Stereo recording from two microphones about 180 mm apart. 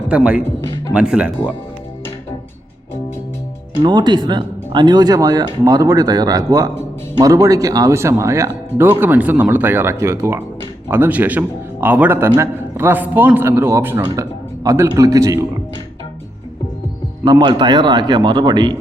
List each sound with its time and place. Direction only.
0.1 s a man's voice: 5° right (ahead or behind)
3.8 s a man's voice: 25° right (ahead or behind)
17.2 s speech: 25° right (ahead or behind)